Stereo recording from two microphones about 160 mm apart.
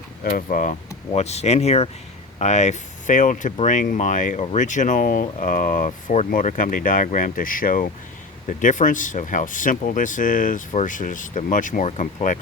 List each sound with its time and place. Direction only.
0.3 s speech: 60° left (ahead or behind)